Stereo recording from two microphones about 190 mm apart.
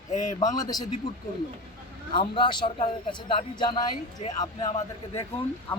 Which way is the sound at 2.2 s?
25° left (ahead or behind).